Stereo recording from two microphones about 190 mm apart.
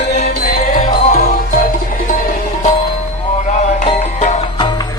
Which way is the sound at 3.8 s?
40° left (ahead or behind).